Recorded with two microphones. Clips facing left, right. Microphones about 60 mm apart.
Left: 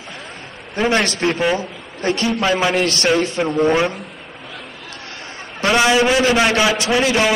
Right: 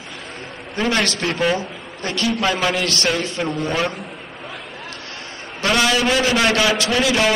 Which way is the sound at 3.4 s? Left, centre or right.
Centre.